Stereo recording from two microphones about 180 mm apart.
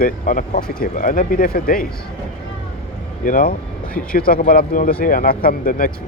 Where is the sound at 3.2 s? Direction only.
50° left (ahead or behind).